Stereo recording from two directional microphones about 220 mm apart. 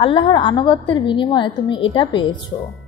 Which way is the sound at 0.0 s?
20° left (ahead or behind).